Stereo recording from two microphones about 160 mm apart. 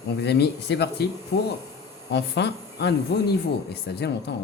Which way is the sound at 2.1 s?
90° left.